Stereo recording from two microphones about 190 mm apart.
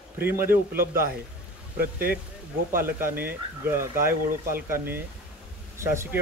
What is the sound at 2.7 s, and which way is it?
Speech, 50° right (ahead or behind).